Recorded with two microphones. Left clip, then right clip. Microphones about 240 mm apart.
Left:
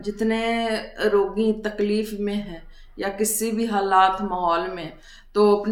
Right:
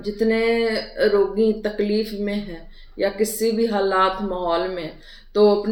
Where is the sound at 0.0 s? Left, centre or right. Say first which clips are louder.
Right 4 dB; centre.